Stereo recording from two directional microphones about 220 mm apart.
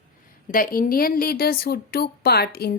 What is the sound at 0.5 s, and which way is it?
A woman's voice, 40° left (ahead or behind).